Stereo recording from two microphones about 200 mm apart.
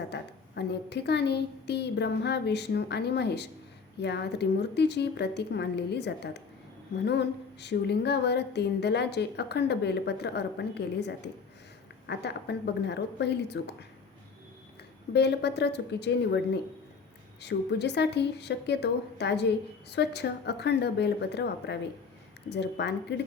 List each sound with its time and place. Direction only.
0.1 s a woman's voice: 55° left (ahead or behind)
15.1 s a woman's voice: 55° left (ahead or behind)
17.4 s a woman's voice: 55° left (ahead or behind)